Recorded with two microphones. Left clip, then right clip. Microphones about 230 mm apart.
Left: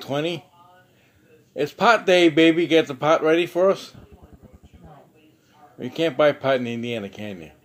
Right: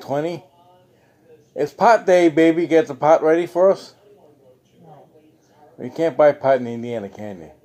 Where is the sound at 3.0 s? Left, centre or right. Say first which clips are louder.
Right 4 dB; centre.